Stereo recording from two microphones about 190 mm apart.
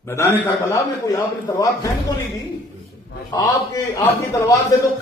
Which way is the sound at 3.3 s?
20° left (ahead or behind).